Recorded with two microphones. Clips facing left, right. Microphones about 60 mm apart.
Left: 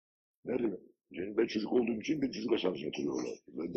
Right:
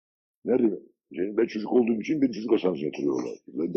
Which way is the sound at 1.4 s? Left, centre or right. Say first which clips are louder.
Right 5 dB; right.